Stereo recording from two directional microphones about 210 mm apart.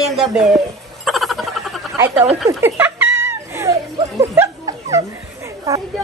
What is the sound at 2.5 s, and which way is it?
Music, 10° right (ahead or behind).